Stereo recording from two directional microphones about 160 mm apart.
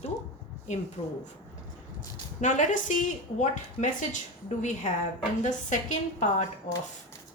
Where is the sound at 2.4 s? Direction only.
50° left (ahead or behind).